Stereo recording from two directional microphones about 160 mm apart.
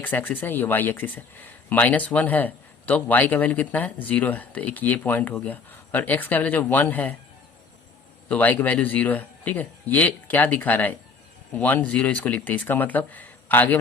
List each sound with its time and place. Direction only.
0.0 s speech: 10° left (ahead or behind)
8.3 s speech: 10° left (ahead or behind)